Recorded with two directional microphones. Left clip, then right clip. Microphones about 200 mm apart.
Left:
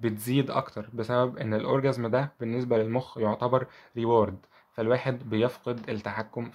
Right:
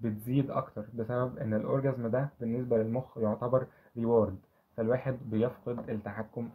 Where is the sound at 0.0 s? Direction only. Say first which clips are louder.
Left 5 dB; 35° left (ahead or behind).